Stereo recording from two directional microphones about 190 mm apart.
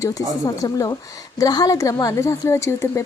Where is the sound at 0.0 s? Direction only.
20° left (ahead or behind).